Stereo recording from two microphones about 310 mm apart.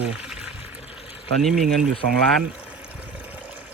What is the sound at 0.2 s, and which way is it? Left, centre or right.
Water, centre.